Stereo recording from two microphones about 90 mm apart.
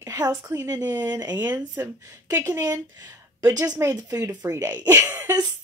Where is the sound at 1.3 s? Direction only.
20° right (ahead or behind).